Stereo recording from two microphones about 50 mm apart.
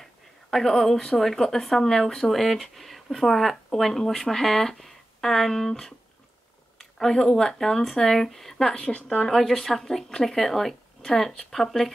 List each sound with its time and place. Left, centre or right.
0.0 s a woman's voice: centre
8.7 s speech: left
9.2 s a woman's voice: centre